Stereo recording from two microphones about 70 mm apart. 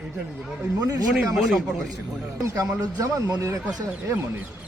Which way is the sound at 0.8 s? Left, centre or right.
Right.